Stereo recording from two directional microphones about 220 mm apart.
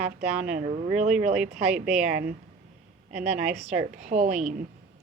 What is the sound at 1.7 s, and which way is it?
A woman's voice, 5° right (ahead or behind).